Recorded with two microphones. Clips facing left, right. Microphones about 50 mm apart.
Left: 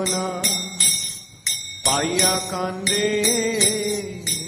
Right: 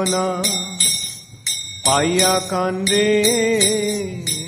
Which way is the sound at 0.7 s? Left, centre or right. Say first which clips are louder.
Right 2 dB; left.